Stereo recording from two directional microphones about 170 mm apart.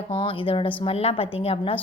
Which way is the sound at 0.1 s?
30° left (ahead or behind).